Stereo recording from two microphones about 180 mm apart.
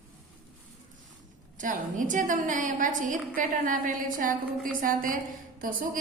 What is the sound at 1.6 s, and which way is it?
A woman's voice, 45° right (ahead or behind).